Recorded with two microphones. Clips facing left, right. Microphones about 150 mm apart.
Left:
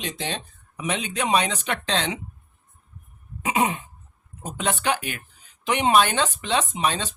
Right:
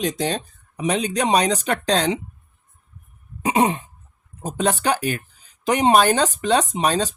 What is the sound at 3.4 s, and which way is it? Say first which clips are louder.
Throat clearing: right 4 dB; 30° right (ahead or behind).